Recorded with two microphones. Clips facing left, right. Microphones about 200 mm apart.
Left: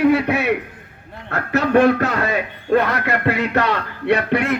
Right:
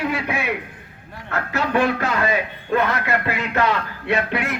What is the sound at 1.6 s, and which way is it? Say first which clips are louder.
Speech: left 6 dB; 45° left (ahead or behind).